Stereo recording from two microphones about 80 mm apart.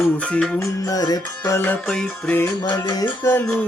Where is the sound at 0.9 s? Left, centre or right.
Left.